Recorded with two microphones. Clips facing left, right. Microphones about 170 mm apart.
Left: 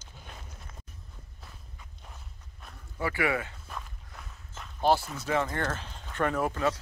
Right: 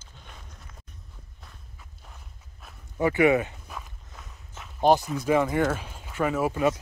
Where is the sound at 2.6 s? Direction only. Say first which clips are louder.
Even; 5° right (ahead or behind).